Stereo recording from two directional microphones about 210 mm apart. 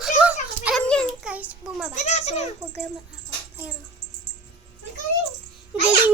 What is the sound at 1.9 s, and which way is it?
Speech, 35° left (ahead or behind).